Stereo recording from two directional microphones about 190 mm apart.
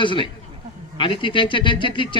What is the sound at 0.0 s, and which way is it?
Speech, 25° left (ahead or behind).